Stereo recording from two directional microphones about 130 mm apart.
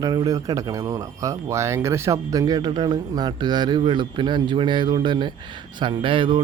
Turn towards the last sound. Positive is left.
turn(degrees=-40)  # may be behind; listen again after turning